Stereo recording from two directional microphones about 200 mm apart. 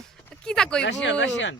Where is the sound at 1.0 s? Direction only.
65° left (ahead or behind).